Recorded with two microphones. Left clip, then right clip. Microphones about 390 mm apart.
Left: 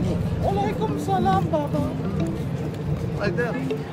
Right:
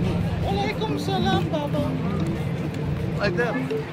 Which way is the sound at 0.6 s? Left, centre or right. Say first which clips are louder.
Left 1 dB; left.